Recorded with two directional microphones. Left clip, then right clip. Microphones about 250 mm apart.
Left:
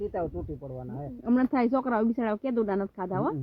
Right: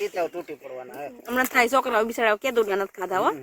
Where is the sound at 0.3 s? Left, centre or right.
Centre.